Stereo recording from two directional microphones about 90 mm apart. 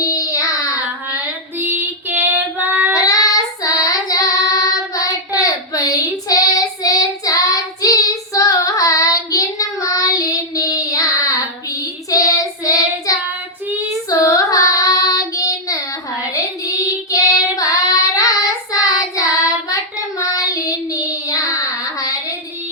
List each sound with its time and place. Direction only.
0.0 s child singing: 40° left (ahead or behind)
1.5 s female singing: 20° right (ahead or behind)
2.9 s child singing: 40° left (ahead or behind)